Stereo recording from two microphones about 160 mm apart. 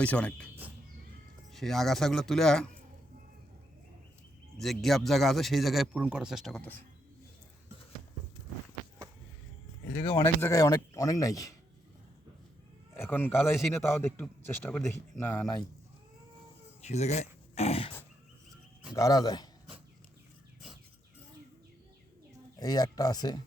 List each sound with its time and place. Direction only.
0.0 s a man's voice: 10° left (ahead or behind)
1.5 s speech: centre (ahead or behind)
4.5 s speech: centre (ahead or behind)
9.9 s speech: 35° left (ahead or behind)
10.2 s speech: 20° left (ahead or behind)
13.0 s a man's voice: 10° left (ahead or behind)
15.2 s speech: 20° left (ahead or behind)
16.8 s speech: 45° left (ahead or behind)
18.9 s speech: 20° left (ahead or behind)
22.6 s speech: 25° left (ahead or behind)